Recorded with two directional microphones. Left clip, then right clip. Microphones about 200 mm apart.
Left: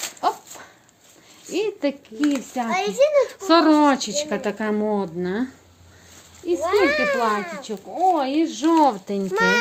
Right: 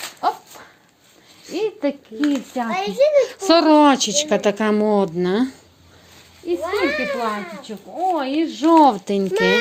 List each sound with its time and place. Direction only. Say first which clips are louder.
0.2 s dog: right 2 dB; 10° right (ahead or behind)
1.5 s a child's voice: right 1 dB; 10° right (ahead or behind)
3.3 s speech: right 3 dB; 35° right (ahead or behind)
6.5 s a child's voice: left 2 dB; centre (ahead or behind)
8.7 s speech: right 6 dB; 30° right (ahead or behind)
9.3 s a child's voice: right 1 dB; centre (ahead or behind)